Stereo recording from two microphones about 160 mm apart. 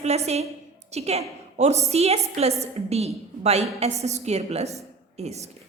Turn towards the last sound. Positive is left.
turn(degrees=-45)  # may be behind; listen again after turning